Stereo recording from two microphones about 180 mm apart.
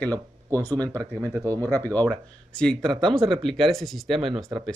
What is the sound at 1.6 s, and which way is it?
A man's voice, 10° left (ahead or behind).